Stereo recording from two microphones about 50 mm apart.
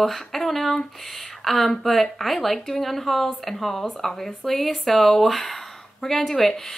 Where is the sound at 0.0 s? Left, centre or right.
Centre.